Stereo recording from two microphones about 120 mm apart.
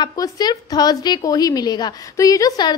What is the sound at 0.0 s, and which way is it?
A woman's voice, 35° left (ahead or behind).